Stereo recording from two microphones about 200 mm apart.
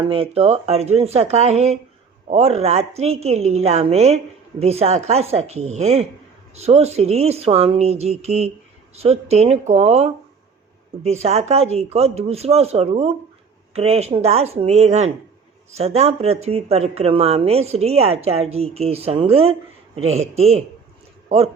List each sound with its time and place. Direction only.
0.0 s a man's voice: 30° right (ahead or behind)